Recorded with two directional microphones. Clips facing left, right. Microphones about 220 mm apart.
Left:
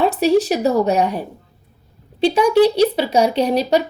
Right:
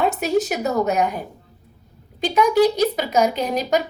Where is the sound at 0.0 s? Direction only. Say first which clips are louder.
Left 5 dB; 35° left (ahead or behind).